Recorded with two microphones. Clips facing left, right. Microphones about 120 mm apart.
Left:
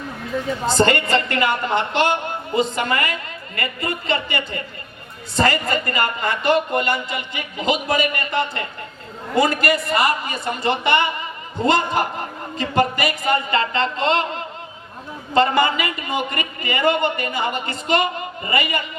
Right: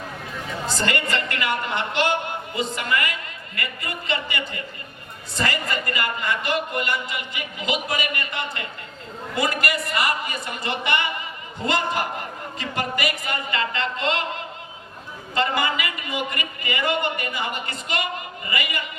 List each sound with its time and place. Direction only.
0.7 s a woman's voice: 30° left (ahead or behind)
15.4 s a woman's voice: 35° left (ahead or behind)